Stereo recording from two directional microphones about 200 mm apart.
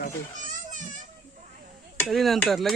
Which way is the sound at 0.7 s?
40° right (ahead or behind).